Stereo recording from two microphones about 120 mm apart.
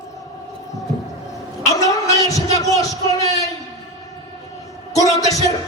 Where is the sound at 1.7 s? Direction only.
30° left (ahead or behind).